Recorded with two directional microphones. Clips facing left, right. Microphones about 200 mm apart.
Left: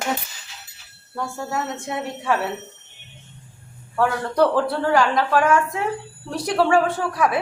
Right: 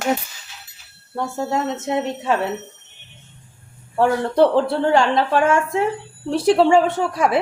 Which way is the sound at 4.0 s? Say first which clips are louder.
Right 3 dB; 25° right (ahead or behind).